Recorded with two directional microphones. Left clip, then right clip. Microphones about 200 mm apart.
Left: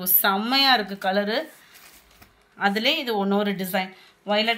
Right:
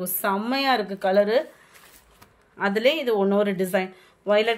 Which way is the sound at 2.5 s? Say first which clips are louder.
Right 1 dB; 50° right (ahead or behind).